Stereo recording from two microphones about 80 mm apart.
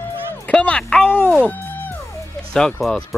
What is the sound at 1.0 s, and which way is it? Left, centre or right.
Speech, left.